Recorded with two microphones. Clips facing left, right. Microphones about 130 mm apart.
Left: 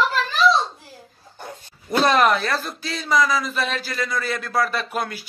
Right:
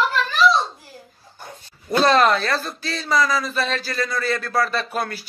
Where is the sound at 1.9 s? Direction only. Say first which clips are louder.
Right 1 dB; 15° left (ahead or behind).